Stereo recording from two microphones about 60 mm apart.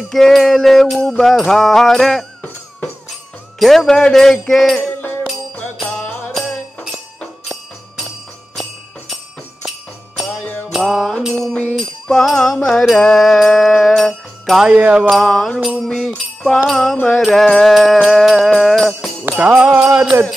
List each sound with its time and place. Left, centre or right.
0.1 s music: centre
3.5 s music: centre
5.9 s music: left
10.7 s music: centre
11.3 s music: centre
14.7 s music: centre
15.0 s music: centre
19.2 s music: right
20.1 s jingle bell: right